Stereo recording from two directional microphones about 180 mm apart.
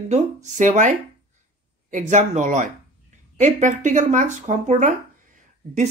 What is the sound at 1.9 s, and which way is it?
Speech, 40° right (ahead or behind).